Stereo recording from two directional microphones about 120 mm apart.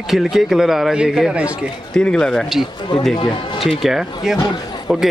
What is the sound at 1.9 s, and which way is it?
Speech, 5° left (ahead or behind).